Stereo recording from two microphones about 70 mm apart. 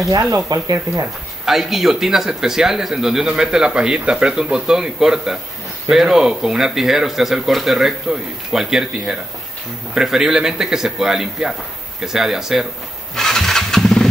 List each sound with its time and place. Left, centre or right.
0.1 s speech: right
1.4 s speech: centre
13.1 s vehicle: centre